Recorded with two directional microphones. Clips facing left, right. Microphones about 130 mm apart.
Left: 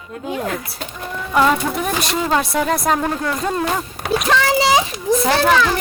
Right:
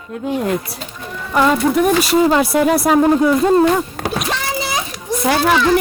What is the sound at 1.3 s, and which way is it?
Speech, centre (ahead or behind).